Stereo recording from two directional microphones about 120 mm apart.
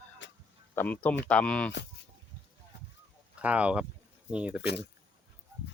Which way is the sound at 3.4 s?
10° right (ahead or behind).